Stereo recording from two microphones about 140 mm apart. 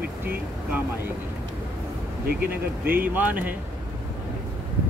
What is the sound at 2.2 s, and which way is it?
Speech, 90° right.